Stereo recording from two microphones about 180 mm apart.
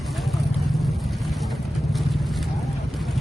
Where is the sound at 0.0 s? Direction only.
Centre (ahead or behind).